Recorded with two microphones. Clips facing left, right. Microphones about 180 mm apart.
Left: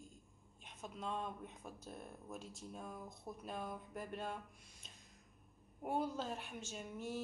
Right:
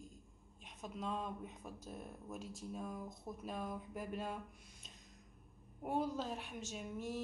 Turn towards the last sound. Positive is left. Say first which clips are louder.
# right 1 dB
turn(degrees=0)  # may be behind; listen again after turning